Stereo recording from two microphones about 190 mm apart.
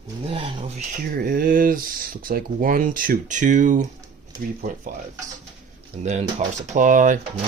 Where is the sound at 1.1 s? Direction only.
50° right (ahead or behind).